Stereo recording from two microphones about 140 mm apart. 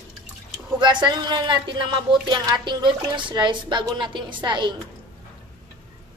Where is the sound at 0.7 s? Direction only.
35° right (ahead or behind).